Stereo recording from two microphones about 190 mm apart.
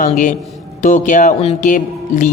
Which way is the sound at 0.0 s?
45° left (ahead or behind).